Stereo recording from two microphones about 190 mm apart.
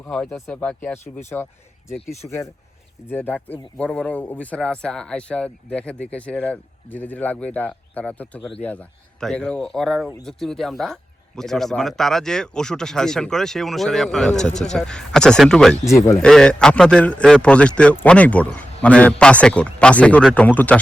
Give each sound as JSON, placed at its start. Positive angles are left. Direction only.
{"t": 0.1, "sound": "a man's voice", "side_deg": 0}
{"t": 2.2, "sound": "a man's voice", "side_deg": 15}
{"t": 15.8, "sound": "a man's voice", "side_deg": 15}
{"t": 16.2, "sound": "a man's voice", "side_deg": 5}